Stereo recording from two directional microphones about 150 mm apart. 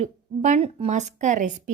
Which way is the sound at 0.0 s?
50° right (ahead or behind).